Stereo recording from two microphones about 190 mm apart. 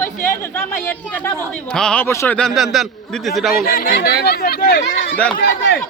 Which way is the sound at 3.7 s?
50° left (ahead or behind).